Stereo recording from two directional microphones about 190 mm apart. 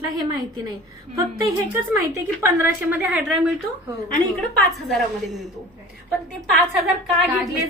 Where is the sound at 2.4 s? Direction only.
10° right (ahead or behind).